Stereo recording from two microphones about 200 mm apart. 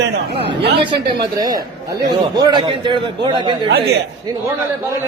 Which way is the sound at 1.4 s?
20° right (ahead or behind).